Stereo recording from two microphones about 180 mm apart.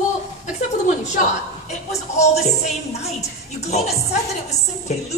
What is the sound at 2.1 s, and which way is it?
Music, 35° left (ahead or behind).